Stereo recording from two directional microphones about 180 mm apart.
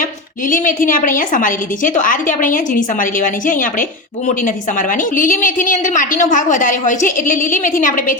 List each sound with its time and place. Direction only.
0.0 s a woman's voice: 50° left (ahead or behind)